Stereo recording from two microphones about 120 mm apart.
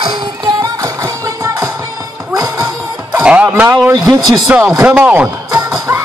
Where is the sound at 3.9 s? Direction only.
30° right (ahead or behind).